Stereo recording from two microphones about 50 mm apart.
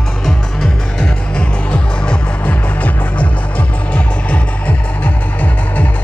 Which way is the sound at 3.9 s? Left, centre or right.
Left.